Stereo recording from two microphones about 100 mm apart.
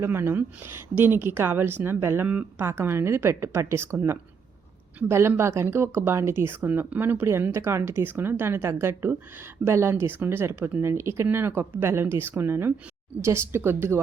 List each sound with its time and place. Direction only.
0.0 s speech: 25° right (ahead or behind)